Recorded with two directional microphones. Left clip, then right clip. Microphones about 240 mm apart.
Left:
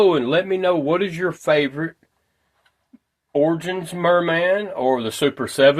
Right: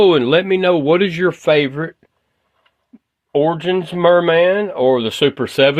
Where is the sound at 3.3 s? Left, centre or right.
Right.